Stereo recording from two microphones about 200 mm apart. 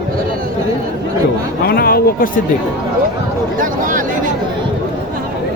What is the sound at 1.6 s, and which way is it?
Speech, 50° left (ahead or behind).